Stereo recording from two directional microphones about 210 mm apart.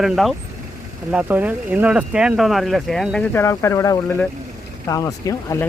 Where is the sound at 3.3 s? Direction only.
15° left (ahead or behind).